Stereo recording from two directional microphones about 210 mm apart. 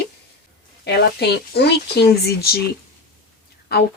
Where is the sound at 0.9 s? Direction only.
50° left (ahead or behind).